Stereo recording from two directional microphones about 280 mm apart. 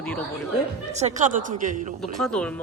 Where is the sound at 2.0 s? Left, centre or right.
Centre.